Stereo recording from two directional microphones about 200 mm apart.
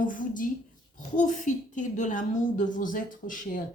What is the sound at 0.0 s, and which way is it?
A woman's voice, 40° left (ahead or behind).